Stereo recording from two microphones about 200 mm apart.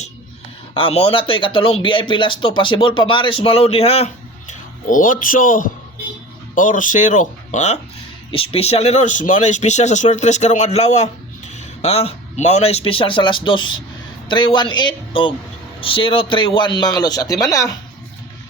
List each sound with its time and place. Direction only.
0.7 s speech: 30° left (ahead or behind)